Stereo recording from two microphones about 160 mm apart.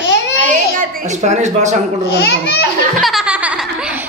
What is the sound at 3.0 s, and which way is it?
Laughter, 5° right (ahead or behind).